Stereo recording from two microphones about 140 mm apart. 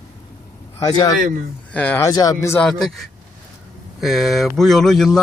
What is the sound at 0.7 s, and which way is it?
Speech, 25° left (ahead or behind).